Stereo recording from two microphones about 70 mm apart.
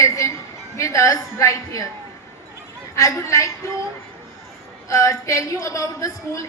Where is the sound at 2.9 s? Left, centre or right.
Left.